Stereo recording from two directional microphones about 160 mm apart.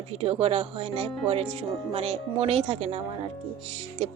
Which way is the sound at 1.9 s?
40° right (ahead or behind).